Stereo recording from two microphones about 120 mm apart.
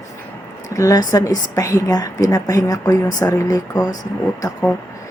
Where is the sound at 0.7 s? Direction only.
30° left (ahead or behind).